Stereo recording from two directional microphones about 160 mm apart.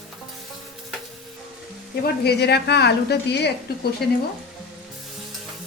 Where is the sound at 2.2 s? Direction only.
90° left.